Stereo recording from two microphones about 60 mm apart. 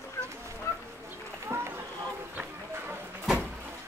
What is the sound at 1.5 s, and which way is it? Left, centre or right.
Run, right.